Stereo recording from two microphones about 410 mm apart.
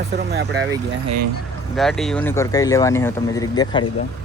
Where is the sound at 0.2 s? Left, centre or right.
Right.